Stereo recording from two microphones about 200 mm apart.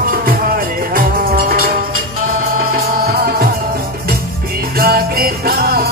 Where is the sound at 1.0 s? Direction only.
45° right (ahead or behind).